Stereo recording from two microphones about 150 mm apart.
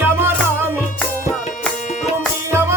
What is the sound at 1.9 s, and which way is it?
Music, 60° left (ahead or behind).